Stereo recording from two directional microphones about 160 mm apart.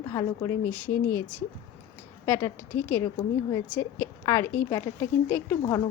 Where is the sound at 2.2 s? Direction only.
15° left (ahead or behind).